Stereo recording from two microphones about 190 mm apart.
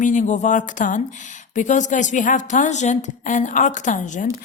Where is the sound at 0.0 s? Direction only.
40° left (ahead or behind).